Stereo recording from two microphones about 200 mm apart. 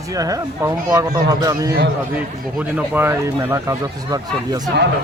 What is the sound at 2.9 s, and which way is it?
Speech, 10° right (ahead or behind).